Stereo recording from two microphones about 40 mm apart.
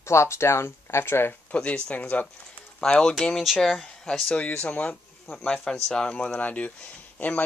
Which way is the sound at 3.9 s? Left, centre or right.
Centre.